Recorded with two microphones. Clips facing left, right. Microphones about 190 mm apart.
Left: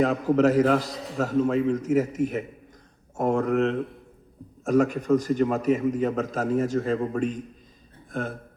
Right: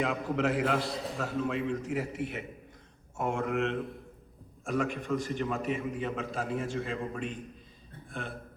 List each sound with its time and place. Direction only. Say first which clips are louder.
0.0 s a man's voice: left 9 dB; 40° left (ahead or behind)